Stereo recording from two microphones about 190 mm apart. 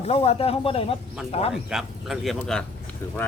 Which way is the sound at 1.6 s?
Centre (ahead or behind).